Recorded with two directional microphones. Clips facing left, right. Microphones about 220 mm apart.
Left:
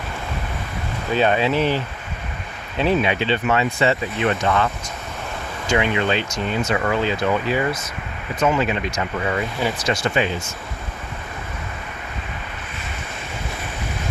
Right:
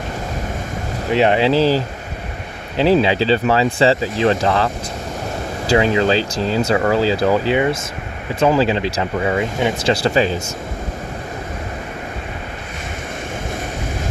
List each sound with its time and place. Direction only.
1.1 s speech: 25° right (ahead or behind)
7.5 s speech: 25° right (ahead or behind)